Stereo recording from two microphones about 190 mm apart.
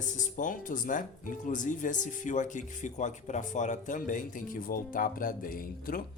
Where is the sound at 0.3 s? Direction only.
45° left (ahead or behind).